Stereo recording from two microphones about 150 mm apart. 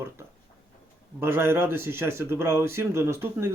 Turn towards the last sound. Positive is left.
turn(degrees=-15)  # may be behind; listen again after turning